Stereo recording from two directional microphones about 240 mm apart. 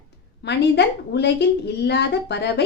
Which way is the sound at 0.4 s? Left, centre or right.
Left.